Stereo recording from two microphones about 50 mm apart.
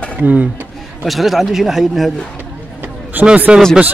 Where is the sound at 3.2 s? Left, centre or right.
Right.